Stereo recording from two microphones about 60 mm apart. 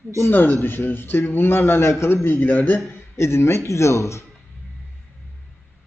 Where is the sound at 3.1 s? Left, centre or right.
Left.